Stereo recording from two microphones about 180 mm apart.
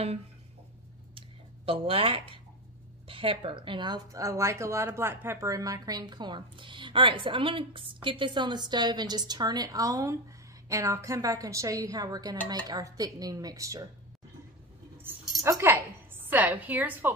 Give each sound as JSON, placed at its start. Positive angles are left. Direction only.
{"t": 1.7, "sound": "a woman's voice", "side_deg": -30}
{"t": 15.0, "sound": "a sound", "side_deg": -10}
{"t": 15.4, "sound": "a woman's voice", "side_deg": -15}